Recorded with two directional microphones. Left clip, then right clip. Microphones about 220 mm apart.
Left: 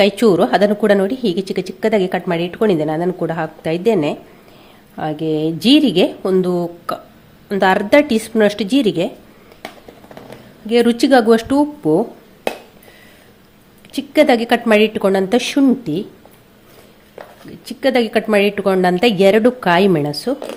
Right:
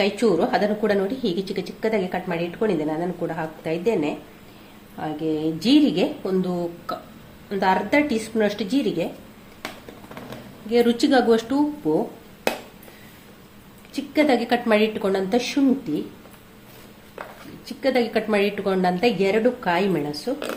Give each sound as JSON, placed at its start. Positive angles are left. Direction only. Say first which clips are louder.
{"t": 0.0, "sound": "a woman's voice", "louder": "left 8 dB", "side_deg": 45}
{"t": 10.7, "sound": "speech", "louder": "left 6 dB", "side_deg": 40}
{"t": 13.9, "sound": "a woman's voice", "louder": "left 7 dB", "side_deg": 45}
{"t": 17.7, "sound": "a woman's voice", "louder": "left 6 dB", "side_deg": 45}